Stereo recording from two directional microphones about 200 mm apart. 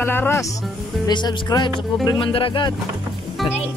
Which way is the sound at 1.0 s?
20° left (ahead or behind).